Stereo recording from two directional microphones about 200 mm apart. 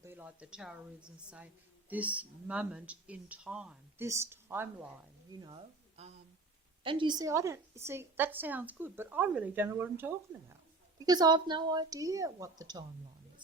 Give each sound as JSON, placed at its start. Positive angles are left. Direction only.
{"t": 0.0, "sound": "speech", "side_deg": -10}
{"t": 1.9, "sound": "a woman's voice", "side_deg": -5}
{"t": 5.4, "sound": "a woman's voice", "side_deg": -25}
{"t": 11.0, "sound": "a woman's voice", "side_deg": -20}